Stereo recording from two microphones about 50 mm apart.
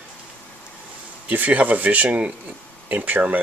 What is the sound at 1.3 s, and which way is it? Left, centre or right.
Speech, right.